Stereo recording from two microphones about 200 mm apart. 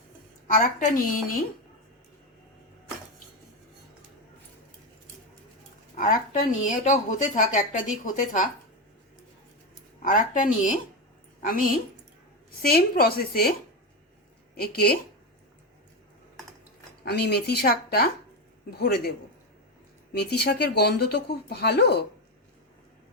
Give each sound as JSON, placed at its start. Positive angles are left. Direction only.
{"t": 0.4, "sound": "a woman's voice", "side_deg": 45}
{"t": 6.0, "sound": "a woman's voice", "side_deg": 40}
{"t": 10.0, "sound": "a woman's voice", "side_deg": 40}
{"t": 17.1, "sound": "speech", "side_deg": 55}
{"t": 20.1, "sound": "speech", "side_deg": 55}